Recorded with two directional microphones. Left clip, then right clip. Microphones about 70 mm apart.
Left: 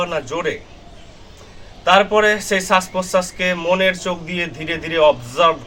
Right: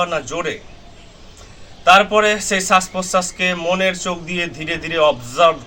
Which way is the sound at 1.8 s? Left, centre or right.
Right.